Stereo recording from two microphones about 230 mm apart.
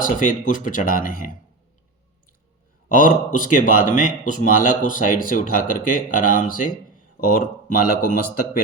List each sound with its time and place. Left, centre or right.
0.0 s speech: left
2.9 s speech: left